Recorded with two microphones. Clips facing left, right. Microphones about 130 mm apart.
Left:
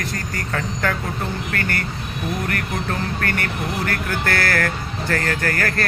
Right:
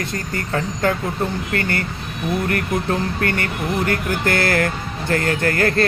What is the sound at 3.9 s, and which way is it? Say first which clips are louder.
Speech: right 3 dB; 20° right (ahead or behind).